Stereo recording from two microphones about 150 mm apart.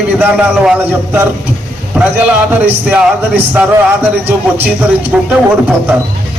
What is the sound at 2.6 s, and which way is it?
A man's voice, 10° right (ahead or behind).